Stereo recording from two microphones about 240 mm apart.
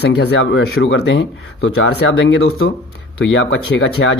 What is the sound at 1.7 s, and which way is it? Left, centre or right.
Speech, left.